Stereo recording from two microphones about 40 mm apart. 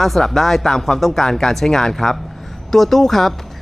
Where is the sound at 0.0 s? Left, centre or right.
Centre.